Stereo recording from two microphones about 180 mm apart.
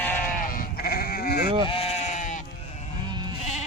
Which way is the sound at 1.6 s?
30° left (ahead or behind).